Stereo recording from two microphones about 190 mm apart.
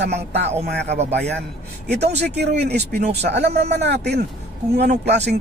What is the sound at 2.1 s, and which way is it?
Speech, 60° right (ahead or behind).